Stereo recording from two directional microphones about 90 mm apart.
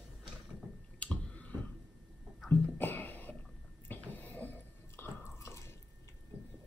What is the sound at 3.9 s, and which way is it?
Biting, 20° left (ahead or behind).